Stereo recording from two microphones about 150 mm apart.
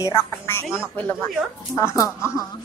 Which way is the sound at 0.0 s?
20° left (ahead or behind).